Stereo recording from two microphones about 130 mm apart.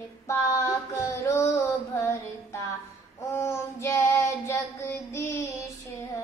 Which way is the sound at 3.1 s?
20° left (ahead or behind).